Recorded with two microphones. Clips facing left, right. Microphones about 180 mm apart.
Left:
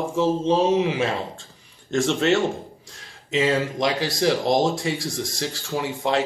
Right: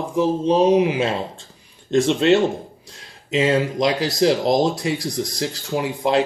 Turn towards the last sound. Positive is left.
turn(degrees=-20)  # may be behind; listen again after turning